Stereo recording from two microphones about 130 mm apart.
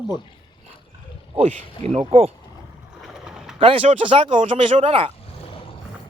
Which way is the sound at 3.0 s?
5° right (ahead or behind).